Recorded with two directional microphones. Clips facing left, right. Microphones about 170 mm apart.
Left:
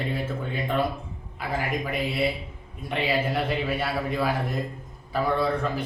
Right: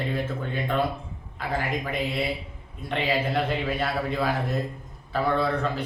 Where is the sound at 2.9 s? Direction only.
10° left (ahead or behind).